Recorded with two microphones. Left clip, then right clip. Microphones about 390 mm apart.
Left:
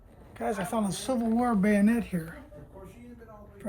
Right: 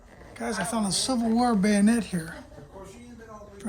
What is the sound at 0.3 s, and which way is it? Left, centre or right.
Speech, centre.